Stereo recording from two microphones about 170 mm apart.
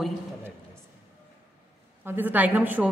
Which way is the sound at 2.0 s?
10° right (ahead or behind).